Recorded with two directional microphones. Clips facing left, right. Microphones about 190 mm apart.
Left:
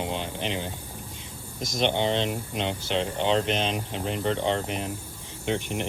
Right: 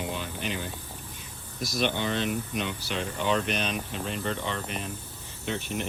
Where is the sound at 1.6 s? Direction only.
20° left (ahead or behind).